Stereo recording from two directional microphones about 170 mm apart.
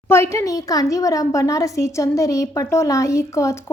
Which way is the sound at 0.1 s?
15° left (ahead or behind).